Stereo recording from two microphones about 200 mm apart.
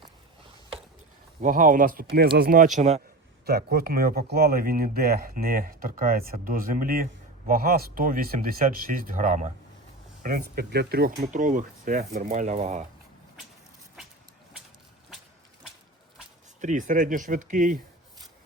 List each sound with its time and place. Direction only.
1.4 s speech: 40° right (ahead or behind)
3.4 s speech: 50° right (ahead or behind)
11.2 s speech: 40° right (ahead or behind)
16.6 s speech: 40° right (ahead or behind)